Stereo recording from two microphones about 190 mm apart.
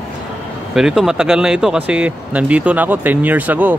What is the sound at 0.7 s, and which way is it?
A man's voice, 5° right (ahead or behind).